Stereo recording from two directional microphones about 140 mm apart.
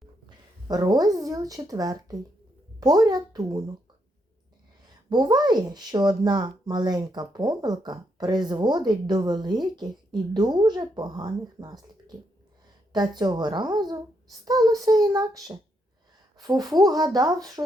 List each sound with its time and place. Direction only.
0.7 s a child's voice: 25° right (ahead or behind)
4.9 s a child's voice: 30° right (ahead or behind)